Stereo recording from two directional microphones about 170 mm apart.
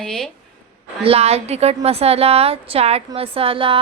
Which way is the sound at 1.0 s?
35° right (ahead or behind).